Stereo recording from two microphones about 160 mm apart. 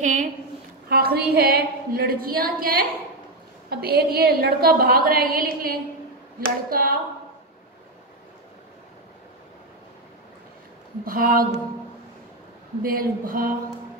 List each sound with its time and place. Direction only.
0.0 s a woman's voice: 50° right (ahead or behind)
0.8 s a woman's voice: 75° right (ahead or behind)
3.8 s a woman's voice: 75° right (ahead or behind)
11.1 s speech: 60° right (ahead or behind)
12.8 s speech: 65° right (ahead or behind)